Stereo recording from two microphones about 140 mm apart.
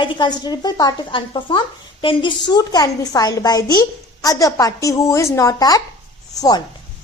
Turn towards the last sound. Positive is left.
turn(degrees=30)  # may be behind; listen again after turning